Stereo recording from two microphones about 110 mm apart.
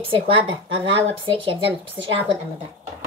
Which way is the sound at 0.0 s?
50° right (ahead or behind).